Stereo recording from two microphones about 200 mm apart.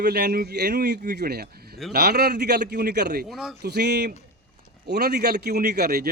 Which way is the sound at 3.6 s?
55° right (ahead or behind).